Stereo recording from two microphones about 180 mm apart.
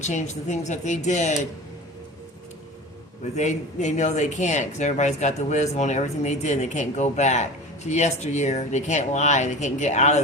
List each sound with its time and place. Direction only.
0.0 s speech: 40° left (ahead or behind)
3.3 s speech: 40° left (ahead or behind)